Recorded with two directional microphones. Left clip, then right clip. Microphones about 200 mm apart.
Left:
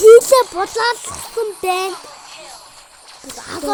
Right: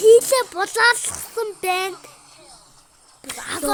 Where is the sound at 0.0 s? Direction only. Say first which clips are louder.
Left 6 dB; 30° left (ahead or behind).